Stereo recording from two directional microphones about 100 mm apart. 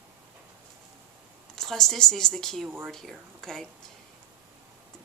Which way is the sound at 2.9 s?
5° left (ahead or behind).